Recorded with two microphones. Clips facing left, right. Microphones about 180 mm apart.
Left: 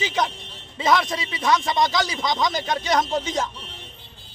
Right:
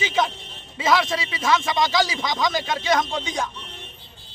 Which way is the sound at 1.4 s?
Centre (ahead or behind).